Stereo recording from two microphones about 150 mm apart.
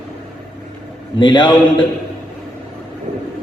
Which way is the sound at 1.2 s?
30° left (ahead or behind).